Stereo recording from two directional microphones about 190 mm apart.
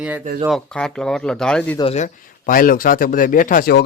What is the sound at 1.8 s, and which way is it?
Speech, 30° left (ahead or behind).